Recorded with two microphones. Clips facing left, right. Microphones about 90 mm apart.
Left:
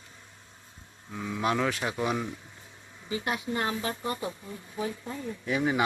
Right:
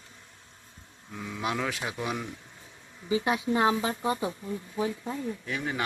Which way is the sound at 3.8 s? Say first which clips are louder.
Right 3 dB; 10° right (ahead or behind).